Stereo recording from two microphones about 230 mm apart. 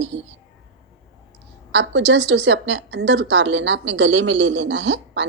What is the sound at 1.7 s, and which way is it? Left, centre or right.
A woman's voice, right.